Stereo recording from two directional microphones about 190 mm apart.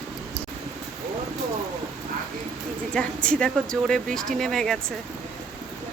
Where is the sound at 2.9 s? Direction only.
5° left (ahead or behind).